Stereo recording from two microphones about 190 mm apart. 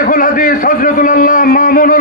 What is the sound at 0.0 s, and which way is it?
A man's voice, 45° left (ahead or behind).